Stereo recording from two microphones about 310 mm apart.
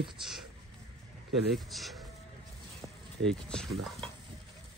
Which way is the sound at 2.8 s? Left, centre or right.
Centre.